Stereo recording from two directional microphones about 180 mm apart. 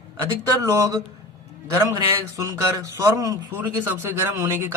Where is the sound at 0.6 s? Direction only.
15° right (ahead or behind).